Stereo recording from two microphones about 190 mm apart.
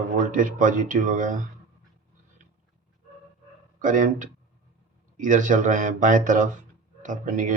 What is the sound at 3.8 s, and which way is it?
Speech, 45° right (ahead or behind).